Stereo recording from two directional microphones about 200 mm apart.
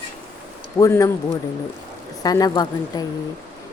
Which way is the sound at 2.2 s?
20° left (ahead or behind).